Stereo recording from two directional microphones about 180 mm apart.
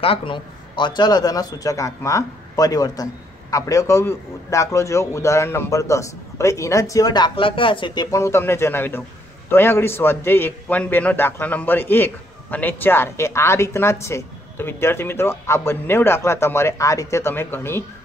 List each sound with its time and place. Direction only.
0.0 s a man's voice: 30° left (ahead or behind); by 17.8 s 15° left (ahead or behind)